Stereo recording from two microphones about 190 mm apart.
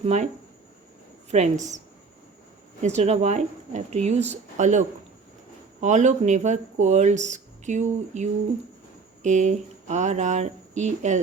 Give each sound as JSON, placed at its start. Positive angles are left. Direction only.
{"t": 0.0, "sound": "speech", "side_deg": -35}
{"t": 1.3, "sound": "speech", "side_deg": -40}
{"t": 2.8, "sound": "speech", "side_deg": -35}